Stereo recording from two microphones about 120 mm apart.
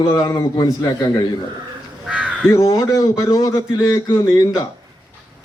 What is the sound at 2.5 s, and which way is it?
A man's voice, 25° left (ahead or behind).